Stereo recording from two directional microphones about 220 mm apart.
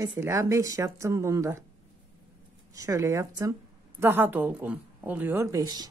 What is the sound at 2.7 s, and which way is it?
A woman's voice, 15° right (ahead or behind).